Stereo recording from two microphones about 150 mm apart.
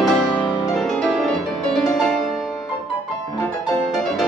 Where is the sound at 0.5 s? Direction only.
30° left (ahead or behind).